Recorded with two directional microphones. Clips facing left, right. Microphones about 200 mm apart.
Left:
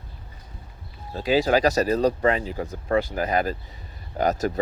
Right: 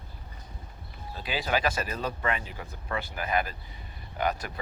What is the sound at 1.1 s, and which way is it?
Speech, 40° left (ahead or behind).